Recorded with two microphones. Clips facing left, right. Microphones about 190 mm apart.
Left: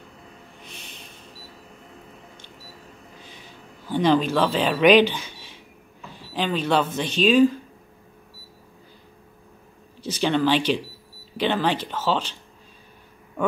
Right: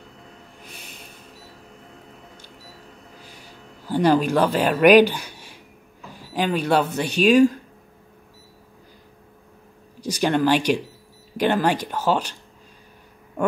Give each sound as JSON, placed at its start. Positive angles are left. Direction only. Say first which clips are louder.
{"t": 0.7, "sound": "a sound", "louder": "right 1 dB", "side_deg": -10}
{"t": 3.8, "sound": "speech", "louder": "right 1 dB", "side_deg": -10}
{"t": 9.9, "sound": "speech", "louder": "right 1 dB", "side_deg": -10}